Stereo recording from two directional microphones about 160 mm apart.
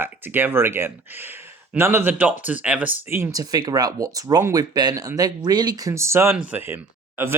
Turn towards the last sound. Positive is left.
turn(degrees=-15)  # may be behind; listen again after turning